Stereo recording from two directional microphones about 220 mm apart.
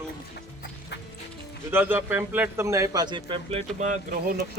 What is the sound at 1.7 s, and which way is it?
A man's voice, 10° right (ahead or behind).